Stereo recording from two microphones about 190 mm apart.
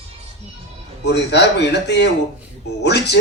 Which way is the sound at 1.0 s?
65° left (ahead or behind).